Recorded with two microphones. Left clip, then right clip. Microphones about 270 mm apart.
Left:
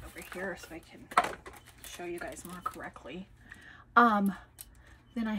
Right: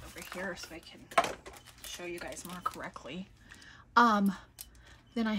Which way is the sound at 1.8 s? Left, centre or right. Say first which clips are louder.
Left 1 dB; centre.